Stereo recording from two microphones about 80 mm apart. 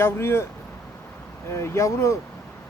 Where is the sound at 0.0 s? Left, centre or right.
Left.